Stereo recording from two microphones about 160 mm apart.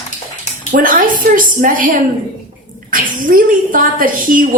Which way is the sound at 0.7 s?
60° right (ahead or behind).